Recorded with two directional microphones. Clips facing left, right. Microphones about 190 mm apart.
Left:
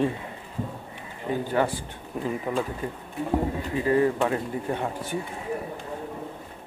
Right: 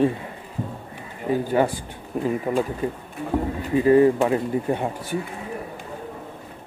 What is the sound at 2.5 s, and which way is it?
Speech, 10° right (ahead or behind).